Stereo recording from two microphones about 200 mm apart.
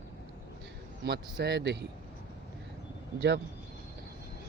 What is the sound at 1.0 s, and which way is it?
Speech, 55° right (ahead or behind).